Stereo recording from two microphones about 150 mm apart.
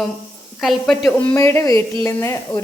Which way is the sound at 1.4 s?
20° left (ahead or behind).